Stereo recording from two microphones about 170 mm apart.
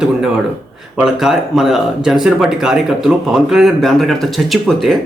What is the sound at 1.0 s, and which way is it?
A man's voice, 5° right (ahead or behind).